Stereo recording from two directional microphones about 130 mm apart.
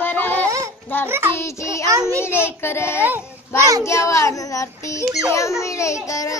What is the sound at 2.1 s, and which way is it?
Child singing, 20° left (ahead or behind).